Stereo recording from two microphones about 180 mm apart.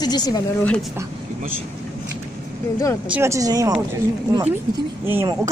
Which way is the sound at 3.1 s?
15° right (ahead or behind).